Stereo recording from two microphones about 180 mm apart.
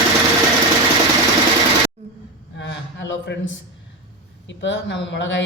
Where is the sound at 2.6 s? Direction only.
80° left.